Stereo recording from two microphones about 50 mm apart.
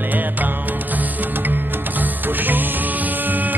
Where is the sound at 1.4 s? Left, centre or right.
Right.